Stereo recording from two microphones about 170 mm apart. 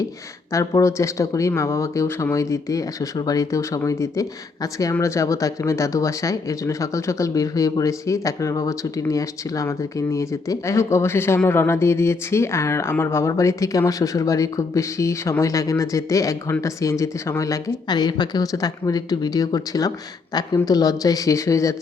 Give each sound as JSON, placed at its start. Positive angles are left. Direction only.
{"t": 0.5, "sound": "speech", "side_deg": 20}